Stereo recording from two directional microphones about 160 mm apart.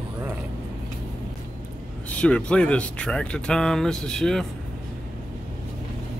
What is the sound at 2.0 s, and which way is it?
Speech, 5° left (ahead or behind).